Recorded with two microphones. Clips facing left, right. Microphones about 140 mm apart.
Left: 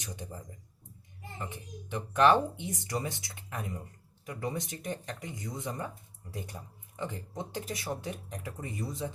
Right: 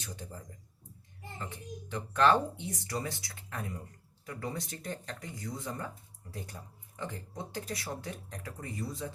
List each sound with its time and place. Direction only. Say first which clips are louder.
0.0 s speech: left 2 dB; 20° left (ahead or behind)